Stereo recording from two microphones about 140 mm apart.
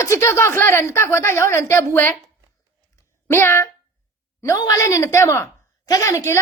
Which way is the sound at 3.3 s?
20° left (ahead or behind).